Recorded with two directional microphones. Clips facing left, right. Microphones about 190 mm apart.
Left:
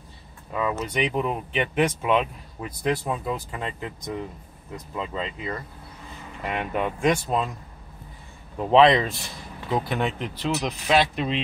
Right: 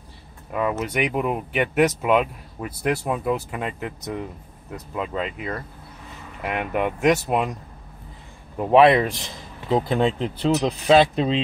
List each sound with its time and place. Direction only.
0.5 s speech: 10° right (ahead or behind)
4.9 s speech: 10° right (ahead or behind)
8.5 s speech: 10° right (ahead or behind)
9.7 s speech: 30° right (ahead or behind)